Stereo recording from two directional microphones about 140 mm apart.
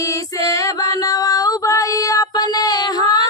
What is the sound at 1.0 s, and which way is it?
Child singing, 25° left (ahead or behind).